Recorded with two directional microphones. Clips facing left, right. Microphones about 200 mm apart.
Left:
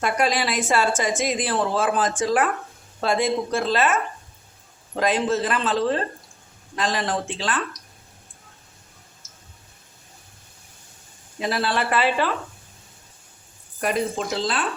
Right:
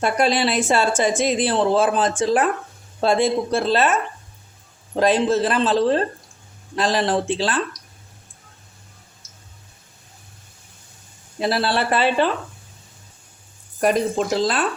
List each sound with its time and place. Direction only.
0.0 s a man's voice: 30° right (ahead or behind)
4.9 s a man's voice: 30° right (ahead or behind)
11.3 s a man's voice: 35° right (ahead or behind)
13.8 s speech: 40° right (ahead or behind)